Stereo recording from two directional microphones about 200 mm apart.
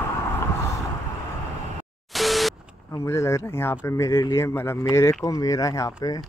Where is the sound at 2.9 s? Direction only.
15° left (ahead or behind).